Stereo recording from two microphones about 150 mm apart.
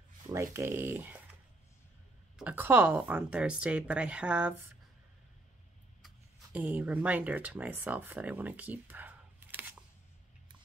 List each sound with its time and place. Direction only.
0.3 s speech: 20° right (ahead or behind)
2.3 s a woman's voice: 10° right (ahead or behind)
6.0 s speech: 10° right (ahead or behind)